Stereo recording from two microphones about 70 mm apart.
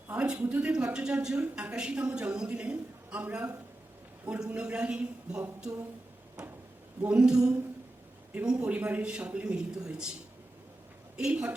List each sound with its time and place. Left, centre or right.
0.1 s speech: centre
7.0 s speech: centre
11.2 s speech: centre